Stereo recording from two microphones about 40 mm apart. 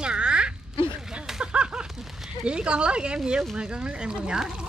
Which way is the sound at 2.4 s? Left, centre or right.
Right.